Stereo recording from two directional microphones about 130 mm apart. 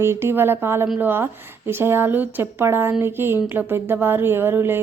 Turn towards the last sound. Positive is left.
turn(degrees=-15)  # may be behind; listen again after turning